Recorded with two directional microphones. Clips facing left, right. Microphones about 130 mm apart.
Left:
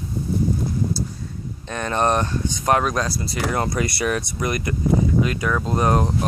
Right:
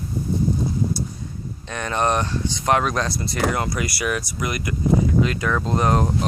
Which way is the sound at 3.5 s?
30° left (ahead or behind).